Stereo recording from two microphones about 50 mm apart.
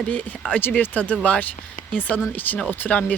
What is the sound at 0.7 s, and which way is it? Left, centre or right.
Speech, left.